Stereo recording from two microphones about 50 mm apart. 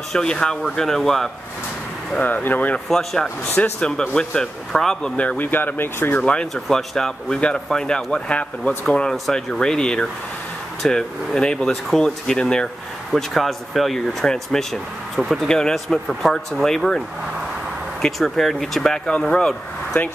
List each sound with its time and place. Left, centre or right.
0.1 s speech: centre
2.2 s speech: left
2.9 s speech: centre
3.8 s speech: centre
5.1 s speech: left
5.5 s speech: left
6.1 s speech: left
6.5 s speech: centre
13.1 s speech: centre
15.1 s speech: centre
15.4 s speech: centre
15.7 s speech: centre
18.0 s speech: centre